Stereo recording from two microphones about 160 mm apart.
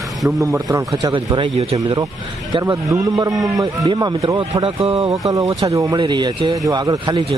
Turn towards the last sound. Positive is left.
turn(degrees=-25)  # may be behind; listen again after turning